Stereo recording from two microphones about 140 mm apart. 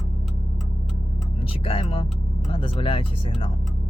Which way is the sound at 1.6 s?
40° left (ahead or behind).